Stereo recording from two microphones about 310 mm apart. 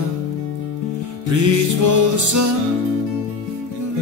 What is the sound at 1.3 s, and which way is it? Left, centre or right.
Music, right.